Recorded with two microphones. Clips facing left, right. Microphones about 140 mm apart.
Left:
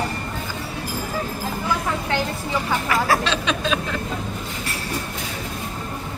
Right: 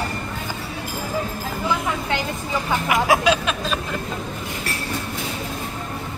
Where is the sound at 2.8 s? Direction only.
15° right (ahead or behind).